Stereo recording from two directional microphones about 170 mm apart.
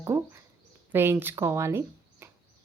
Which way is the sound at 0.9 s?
15° right (ahead or behind).